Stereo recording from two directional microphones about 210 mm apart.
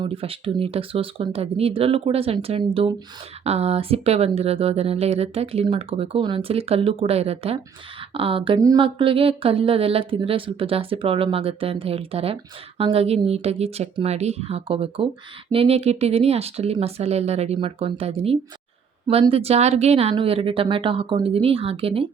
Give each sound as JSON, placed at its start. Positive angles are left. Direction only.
{"t": 0.0, "sound": "speech", "side_deg": -25}